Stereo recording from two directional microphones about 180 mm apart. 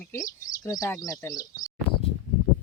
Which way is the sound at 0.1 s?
20° left (ahead or behind).